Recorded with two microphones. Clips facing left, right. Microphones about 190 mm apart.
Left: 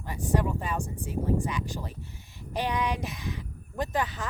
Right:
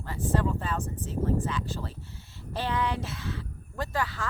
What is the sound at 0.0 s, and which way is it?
Speech, 15° left (ahead or behind).